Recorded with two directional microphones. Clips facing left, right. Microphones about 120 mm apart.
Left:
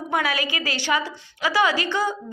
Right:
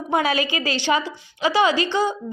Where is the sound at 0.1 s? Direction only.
25° right (ahead or behind).